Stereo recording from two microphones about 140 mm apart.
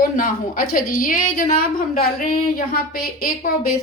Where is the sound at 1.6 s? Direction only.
90° left.